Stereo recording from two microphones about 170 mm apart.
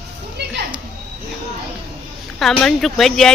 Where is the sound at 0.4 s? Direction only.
75° right (ahead or behind).